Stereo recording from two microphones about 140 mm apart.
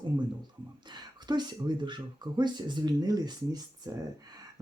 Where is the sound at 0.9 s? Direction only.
30° right (ahead or behind).